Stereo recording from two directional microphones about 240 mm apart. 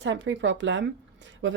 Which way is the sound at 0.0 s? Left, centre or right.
Right.